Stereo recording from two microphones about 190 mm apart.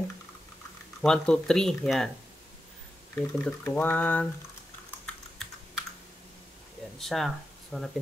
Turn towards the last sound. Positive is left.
turn(degrees=5)  # may be behind; listen again after turning